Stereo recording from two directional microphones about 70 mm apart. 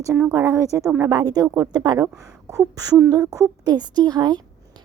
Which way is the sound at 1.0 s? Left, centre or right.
Right.